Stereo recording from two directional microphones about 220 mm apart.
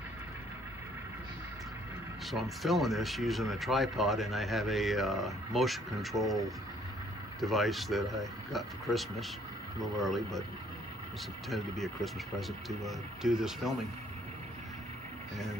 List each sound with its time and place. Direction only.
2.3 s speech: centre (ahead or behind)
7.3 s speech: centre (ahead or behind)
11.5 s speech: centre (ahead or behind)